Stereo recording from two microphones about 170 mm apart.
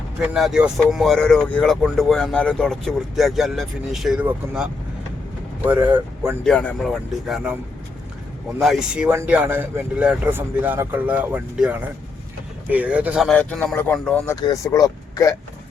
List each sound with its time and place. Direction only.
0.3 s speech: 5° right (ahead or behind)
6.4 s speech: 5° left (ahead or behind)
8.6 s speech: 5° right (ahead or behind)
13.3 s speech: 5° left (ahead or behind)
14.3 s speech: 20° left (ahead or behind)